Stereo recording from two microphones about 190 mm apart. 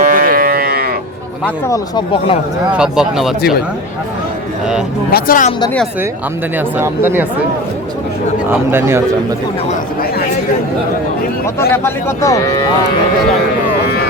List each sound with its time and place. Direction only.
0.0 s livestock: 45° right (ahead or behind)
1.5 s speech: 15° left (ahead or behind)
2.7 s speech: 5° right (ahead or behind)
5.1 s speech: 45° left (ahead or behind)
5.5 s speech: 25° left (ahead or behind)
6.6 s speech: 10° right (ahead or behind)
8.4 s speech: 10° right (ahead or behind)
9.6 s speech: 50° left (ahead or behind)
11.7 s speech: 10° left (ahead or behind)